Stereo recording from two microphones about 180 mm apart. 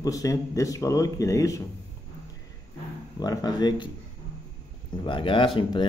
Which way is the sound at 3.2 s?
20° left (ahead or behind).